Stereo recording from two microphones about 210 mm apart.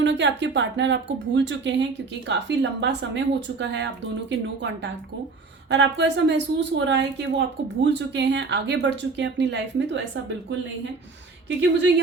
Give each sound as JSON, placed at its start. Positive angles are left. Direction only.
{"t": 0.0, "sound": "speech", "side_deg": -60}